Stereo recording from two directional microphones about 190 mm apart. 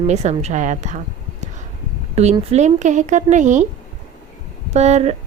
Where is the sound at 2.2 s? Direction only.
35° right (ahead or behind).